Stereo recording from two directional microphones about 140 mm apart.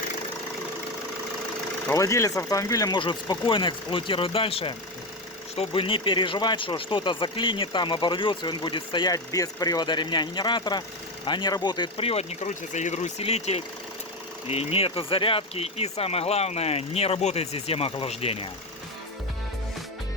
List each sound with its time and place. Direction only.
1.9 s speech: 20° left (ahead or behind); by 18.4 s 45° left (ahead or behind)